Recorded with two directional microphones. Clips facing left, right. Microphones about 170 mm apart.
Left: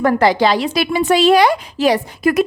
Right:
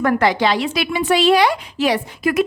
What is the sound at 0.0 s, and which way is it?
A woman's voice, 35° left (ahead or behind).